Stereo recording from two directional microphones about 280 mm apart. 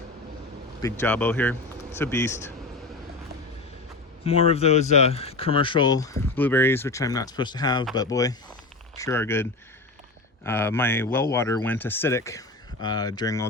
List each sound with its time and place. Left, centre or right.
0.8 s speech: centre
4.2 s speech: left